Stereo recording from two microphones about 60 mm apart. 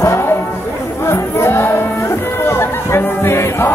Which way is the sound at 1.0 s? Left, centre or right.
Left.